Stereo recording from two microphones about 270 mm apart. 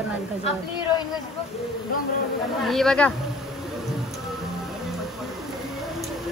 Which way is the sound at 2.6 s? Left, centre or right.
Centre.